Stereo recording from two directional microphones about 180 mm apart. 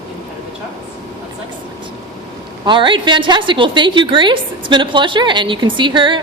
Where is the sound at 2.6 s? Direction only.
25° right (ahead or behind).